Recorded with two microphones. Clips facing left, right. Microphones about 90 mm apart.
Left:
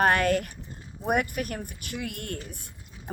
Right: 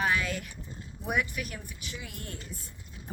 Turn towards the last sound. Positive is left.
turn(degrees=65)  # may be behind; listen again after turning